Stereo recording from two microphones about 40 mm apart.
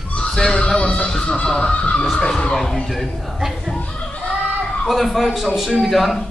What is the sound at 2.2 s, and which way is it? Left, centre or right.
Music, left.